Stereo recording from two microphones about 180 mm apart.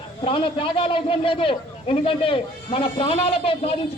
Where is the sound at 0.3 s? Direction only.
30° left (ahead or behind).